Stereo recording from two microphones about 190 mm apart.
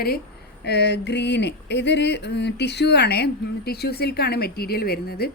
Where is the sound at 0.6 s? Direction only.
60° left (ahead or behind).